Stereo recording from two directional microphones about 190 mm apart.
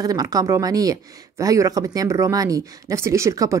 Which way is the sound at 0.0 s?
20° right (ahead or behind).